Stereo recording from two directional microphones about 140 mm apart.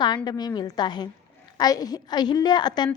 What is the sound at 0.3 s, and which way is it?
A woman's voice, 30° left (ahead or behind).